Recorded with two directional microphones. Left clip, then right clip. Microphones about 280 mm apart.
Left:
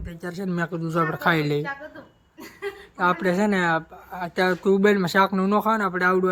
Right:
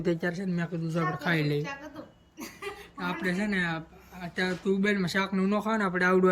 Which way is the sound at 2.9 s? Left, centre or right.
Centre.